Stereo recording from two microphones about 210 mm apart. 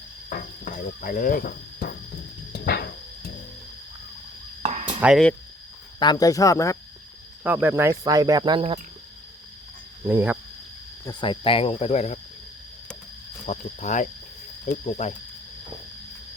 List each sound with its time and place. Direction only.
0.3 s a sound: 40° left (ahead or behind)
4.6 s insect: 30° right (ahead or behind)
4.9 s speech: 5° right (ahead or behind)
6.0 s speech: 20° left (ahead or behind)
7.4 s speech: 10° right (ahead or behind)
10.0 s speech: 10° right (ahead or behind)
11.0 s speech: 20° left (ahead or behind)
13.4 s speech: 35° left (ahead or behind)